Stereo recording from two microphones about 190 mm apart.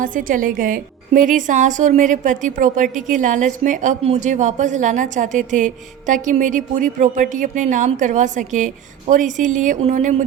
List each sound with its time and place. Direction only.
0.0 s a woman's voice: 45° right (ahead or behind)